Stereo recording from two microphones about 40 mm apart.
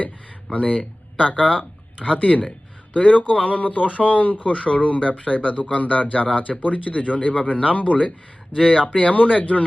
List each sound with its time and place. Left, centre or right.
0.5 s speech: left
2.2 s speech: left
4.6 s speech: left
8.5 s speech: centre
9.0 s speech: left